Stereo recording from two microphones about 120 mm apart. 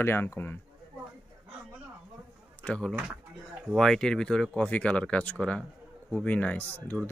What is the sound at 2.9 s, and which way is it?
Speech, 5° right (ahead or behind).